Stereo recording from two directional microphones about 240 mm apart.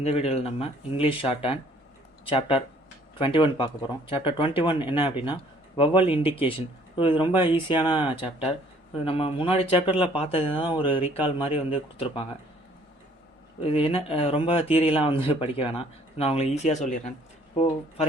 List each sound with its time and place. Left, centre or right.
0.0 s speech: left
13.7 s speech: left